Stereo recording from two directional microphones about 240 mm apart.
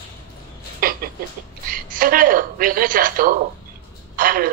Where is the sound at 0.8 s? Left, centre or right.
Right.